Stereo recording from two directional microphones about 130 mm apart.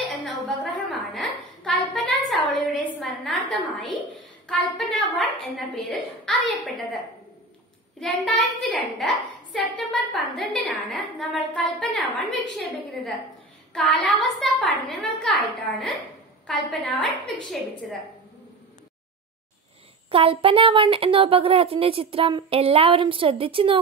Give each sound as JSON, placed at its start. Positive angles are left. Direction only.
{"t": 0.7, "sound": "a sound", "side_deg": 5}
{"t": 4.5, "sound": "a child's voice", "side_deg": 5}
{"t": 8.0, "sound": "a child's voice", "side_deg": 0}
{"t": 16.4, "sound": "a child's voice", "side_deg": 0}
{"t": 20.1, "sound": "speech", "side_deg": -45}